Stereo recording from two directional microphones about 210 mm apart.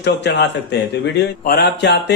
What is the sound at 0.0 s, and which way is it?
A man's voice, 55° left (ahead or behind).